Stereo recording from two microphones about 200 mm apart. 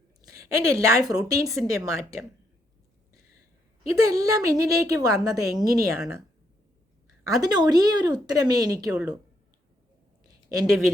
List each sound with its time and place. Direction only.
0.2 s a woman's voice: 15° right (ahead or behind)
4.0 s a woman's voice: 15° right (ahead or behind)
7.3 s speech: 20° right (ahead or behind)
8.9 s speech: 5° right (ahead or behind)
10.2 s a sound: 20° right (ahead or behind)